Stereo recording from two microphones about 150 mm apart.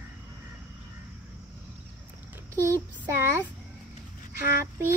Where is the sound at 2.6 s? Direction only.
20° right (ahead or behind).